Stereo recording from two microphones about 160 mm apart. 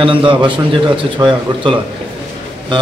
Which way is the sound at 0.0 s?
30° right (ahead or behind).